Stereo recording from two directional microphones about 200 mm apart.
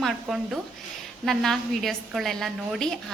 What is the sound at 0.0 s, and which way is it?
A woman's voice, centre (ahead or behind).